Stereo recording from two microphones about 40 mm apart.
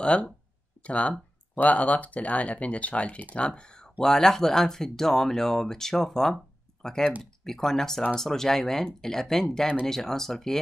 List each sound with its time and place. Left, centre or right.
0.0 s speech: left
4.0 s speech: centre